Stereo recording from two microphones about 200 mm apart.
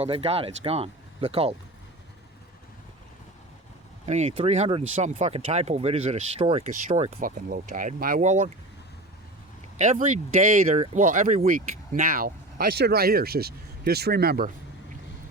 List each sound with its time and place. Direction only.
0.0 s speech: 30° right (ahead or behind)
4.0 s speech: 35° right (ahead or behind)
9.7 s speech: 35° right (ahead or behind)